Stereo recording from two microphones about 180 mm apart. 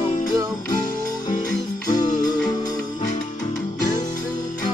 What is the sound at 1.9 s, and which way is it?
Music, 25° left (ahead or behind).